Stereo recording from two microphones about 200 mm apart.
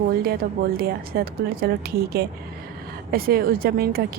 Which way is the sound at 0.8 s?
50° right (ahead or behind).